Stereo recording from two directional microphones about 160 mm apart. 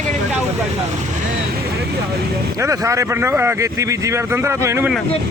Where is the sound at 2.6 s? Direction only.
20° right (ahead or behind).